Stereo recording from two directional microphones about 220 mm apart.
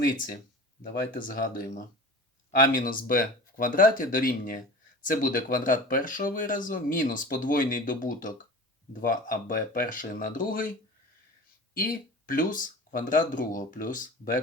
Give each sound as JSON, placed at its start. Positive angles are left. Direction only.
{"t": 0.8, "sound": "speech", "side_deg": 40}
{"t": 11.8, "sound": "speech", "side_deg": 40}